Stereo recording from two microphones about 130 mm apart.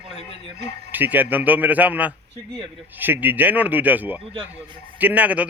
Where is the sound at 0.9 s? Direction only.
15° right (ahead or behind).